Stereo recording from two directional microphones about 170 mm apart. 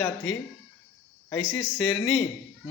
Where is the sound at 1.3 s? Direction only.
5° left (ahead or behind).